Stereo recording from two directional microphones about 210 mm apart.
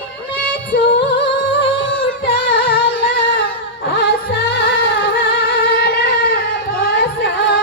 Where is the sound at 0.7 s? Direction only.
60° left (ahead or behind).